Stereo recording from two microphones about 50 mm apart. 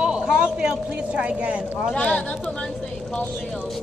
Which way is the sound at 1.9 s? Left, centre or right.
Left.